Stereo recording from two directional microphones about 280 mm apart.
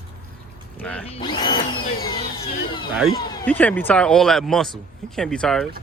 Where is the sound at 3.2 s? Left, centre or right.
Centre.